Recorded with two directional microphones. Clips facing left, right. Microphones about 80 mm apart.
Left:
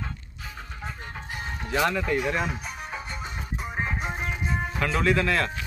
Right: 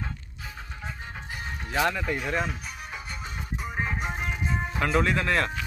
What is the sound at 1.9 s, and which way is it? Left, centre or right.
Speech, centre.